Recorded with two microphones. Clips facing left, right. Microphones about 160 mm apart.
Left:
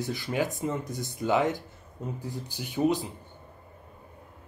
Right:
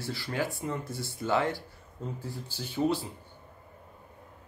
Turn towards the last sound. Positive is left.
turn(degrees=15)  # may be behind; listen again after turning